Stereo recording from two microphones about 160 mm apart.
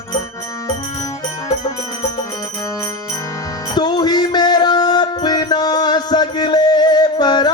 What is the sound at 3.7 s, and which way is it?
Music, 25° left (ahead or behind).